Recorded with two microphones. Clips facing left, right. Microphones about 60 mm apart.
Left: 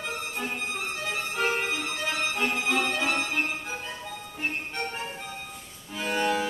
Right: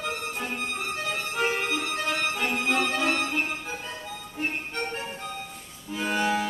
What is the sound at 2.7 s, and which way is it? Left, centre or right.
Music, centre.